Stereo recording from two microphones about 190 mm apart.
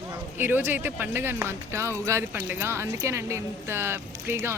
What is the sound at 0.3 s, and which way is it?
Speech, 10° right (ahead or behind).